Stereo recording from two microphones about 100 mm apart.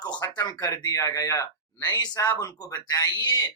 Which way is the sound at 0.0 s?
40° left (ahead or behind).